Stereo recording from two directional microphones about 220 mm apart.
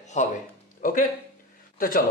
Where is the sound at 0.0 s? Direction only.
30° left (ahead or behind).